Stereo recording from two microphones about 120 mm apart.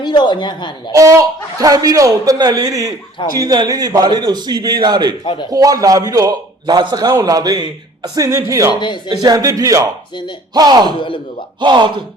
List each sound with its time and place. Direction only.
0.0 s a man's voice: 40° left (ahead or behind)
0.9 s a man's voice: 25° right (ahead or behind)
5.2 s speech: 45° left (ahead or behind)
5.5 s a man's voice: 30° right (ahead or behind)
11.0 s speech: 45° left (ahead or behind)
11.6 s a man's voice: 40° right (ahead or behind)